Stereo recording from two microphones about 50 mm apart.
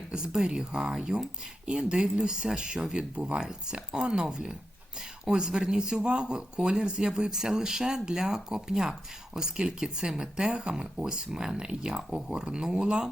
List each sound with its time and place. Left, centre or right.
0.1 s speech: centre